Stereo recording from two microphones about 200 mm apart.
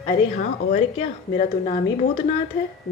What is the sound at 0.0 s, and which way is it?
Speech, 35° left (ahead or behind).